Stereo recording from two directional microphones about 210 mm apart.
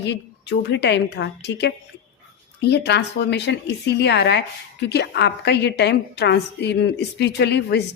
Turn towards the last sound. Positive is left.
turn(degrees=55)  # may be behind; listen again after turning